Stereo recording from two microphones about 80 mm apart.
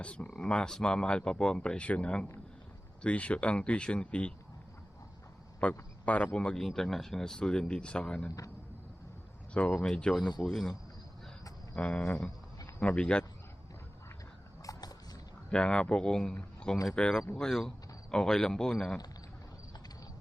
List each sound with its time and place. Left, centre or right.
0.0 s speech: centre
5.5 s speech: centre
9.6 s a man's voice: centre
11.7 s speech: centre
14.6 s vehicle: left
15.4 s speech: centre